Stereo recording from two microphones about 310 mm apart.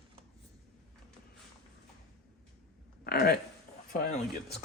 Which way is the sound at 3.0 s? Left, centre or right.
Left.